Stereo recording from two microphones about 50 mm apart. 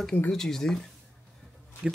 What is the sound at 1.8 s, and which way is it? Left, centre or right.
Speech, right.